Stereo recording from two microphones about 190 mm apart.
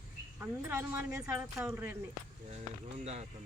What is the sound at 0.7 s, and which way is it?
A woman's voice, 15° right (ahead or behind).